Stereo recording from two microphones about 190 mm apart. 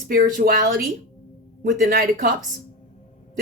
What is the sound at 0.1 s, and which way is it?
Speech, 50° right (ahead or behind).